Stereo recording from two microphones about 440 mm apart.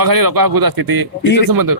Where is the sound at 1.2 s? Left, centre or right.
Left.